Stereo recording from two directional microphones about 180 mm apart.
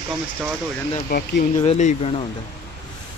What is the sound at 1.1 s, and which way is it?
Speech, 65° left (ahead or behind).